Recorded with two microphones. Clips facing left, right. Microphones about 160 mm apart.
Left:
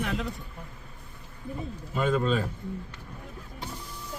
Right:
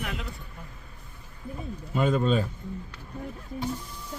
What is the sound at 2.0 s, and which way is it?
Speech, centre (ahead or behind).